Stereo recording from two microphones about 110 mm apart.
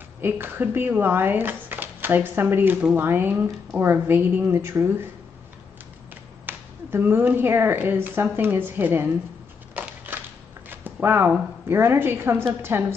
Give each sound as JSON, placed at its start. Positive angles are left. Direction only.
{"t": 0.2, "sound": "a woman's voice", "side_deg": -20}
{"t": 6.4, "sound": "speech", "side_deg": -20}
{"t": 9.8, "sound": "crushing", "side_deg": -20}
{"t": 10.7, "sound": "a woman's voice", "side_deg": -15}